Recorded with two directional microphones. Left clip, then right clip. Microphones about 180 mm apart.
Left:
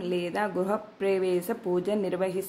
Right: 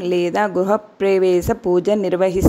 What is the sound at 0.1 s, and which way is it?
Speech, 40° right (ahead or behind).